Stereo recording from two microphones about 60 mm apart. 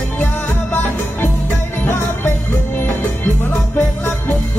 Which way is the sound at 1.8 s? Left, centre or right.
Left.